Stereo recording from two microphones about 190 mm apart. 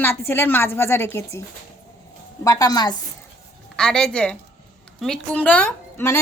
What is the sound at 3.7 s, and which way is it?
A woman's voice, 5° left (ahead or behind).